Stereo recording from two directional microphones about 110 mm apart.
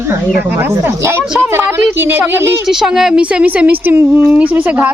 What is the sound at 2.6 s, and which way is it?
Speech, 5° right (ahead or behind).